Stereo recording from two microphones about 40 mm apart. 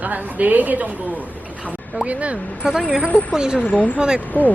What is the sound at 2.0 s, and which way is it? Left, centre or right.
Speech, right.